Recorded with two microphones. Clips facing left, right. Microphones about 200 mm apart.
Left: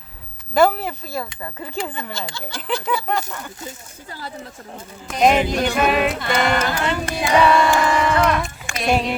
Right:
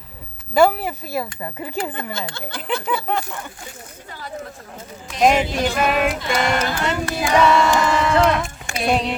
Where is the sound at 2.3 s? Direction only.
55° right (ahead or behind).